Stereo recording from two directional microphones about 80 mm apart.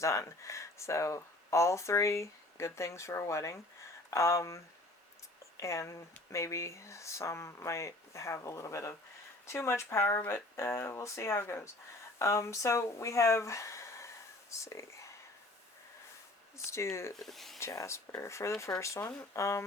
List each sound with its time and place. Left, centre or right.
0.0 s speech: left
16.6 s speech: left
17.2 s speech: centre
17.6 s speech: left